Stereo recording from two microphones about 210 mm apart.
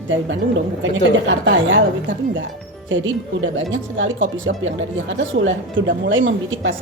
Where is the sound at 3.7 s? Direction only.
65° right (ahead or behind).